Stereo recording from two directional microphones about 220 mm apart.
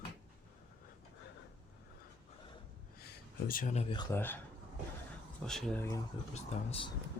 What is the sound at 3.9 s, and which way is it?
Speech, 15° left (ahead or behind).